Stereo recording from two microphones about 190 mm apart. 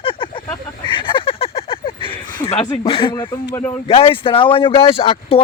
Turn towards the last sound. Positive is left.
turn(degrees=30)  # may be behind; listen again after turning